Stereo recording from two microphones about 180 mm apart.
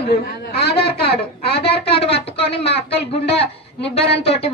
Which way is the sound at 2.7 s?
70° left (ahead or behind).